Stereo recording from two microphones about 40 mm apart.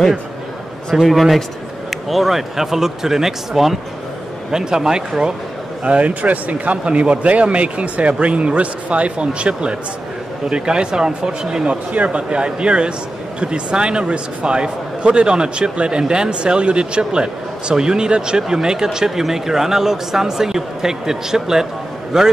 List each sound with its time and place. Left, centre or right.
0.9 s speech: centre
5.9 s a man's voice: right; by 21.6 s centre